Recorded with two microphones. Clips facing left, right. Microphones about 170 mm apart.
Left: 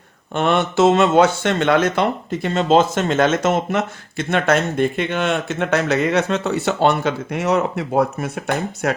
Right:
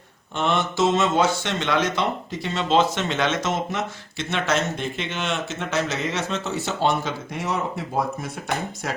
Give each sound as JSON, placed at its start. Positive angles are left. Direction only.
{"t": 0.3, "sound": "speech", "side_deg": 60}